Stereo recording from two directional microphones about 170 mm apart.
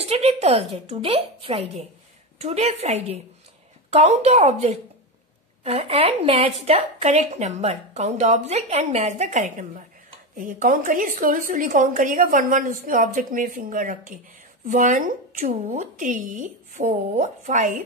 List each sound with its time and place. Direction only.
0.0 s a woman's voice: 40° right (ahead or behind)